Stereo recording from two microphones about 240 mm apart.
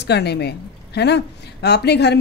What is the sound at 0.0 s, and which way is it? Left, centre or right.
A woman's voice, left.